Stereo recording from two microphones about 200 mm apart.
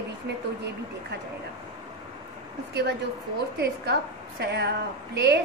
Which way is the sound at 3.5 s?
55° right (ahead or behind).